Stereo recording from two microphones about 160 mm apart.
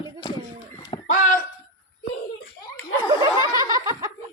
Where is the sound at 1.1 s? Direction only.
55° left (ahead or behind).